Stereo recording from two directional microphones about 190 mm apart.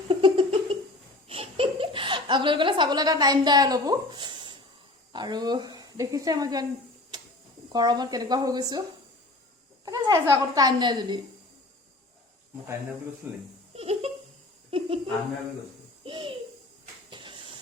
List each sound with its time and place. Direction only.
0.1 s giggle: 25° right (ahead or behind)
1.3 s a sound: 30° right (ahead or behind)
5.1 s speech: 20° right (ahead or behind)
7.7 s speech: 20° right (ahead or behind)
9.8 s speech: 20° right (ahead or behind)
13.2 s speech: 10° right (ahead or behind)
13.7 s a sound: 30° right (ahead or behind)
16.0 s a child's voice: 25° right (ahead or behind)
17.1 s hiss: 25° right (ahead or behind)